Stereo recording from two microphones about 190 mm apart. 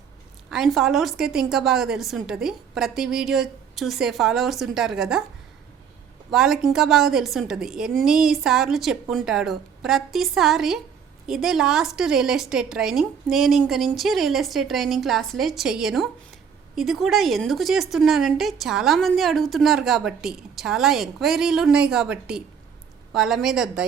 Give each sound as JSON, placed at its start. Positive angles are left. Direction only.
{"t": 0.5, "sound": "a woman's voice", "side_deg": 0}
{"t": 6.3, "sound": "a woman's voice", "side_deg": 0}